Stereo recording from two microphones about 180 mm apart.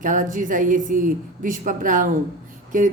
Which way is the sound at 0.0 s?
45° right (ahead or behind).